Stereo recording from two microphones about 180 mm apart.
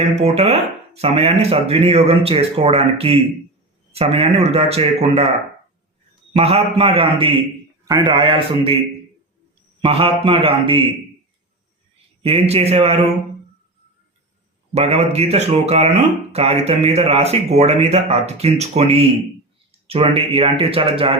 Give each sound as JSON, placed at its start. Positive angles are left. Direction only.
{"t": 0.2, "sound": "speech", "side_deg": -35}
{"t": 6.3, "sound": "speech", "side_deg": -35}
{"t": 9.8, "sound": "speech", "side_deg": -30}
{"t": 12.2, "sound": "speech", "side_deg": -35}
{"t": 14.8, "sound": "speech", "side_deg": -35}